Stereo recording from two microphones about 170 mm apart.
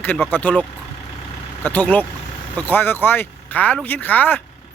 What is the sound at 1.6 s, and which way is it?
A man's voice, 10° left (ahead or behind).